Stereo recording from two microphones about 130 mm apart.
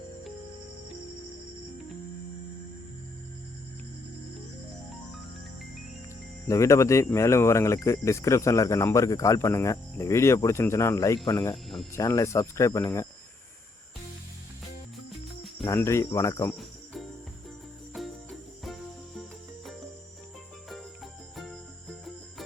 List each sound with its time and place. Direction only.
6.5 s speech: 25° left (ahead or behind)
11.5 s speech: centre (ahead or behind)
11.9 s speech: 25° left (ahead or behind)
15.7 s speech: 20° left (ahead or behind)
16.6 s cricket: centre (ahead or behind)
20.7 s cricket: centre (ahead or behind)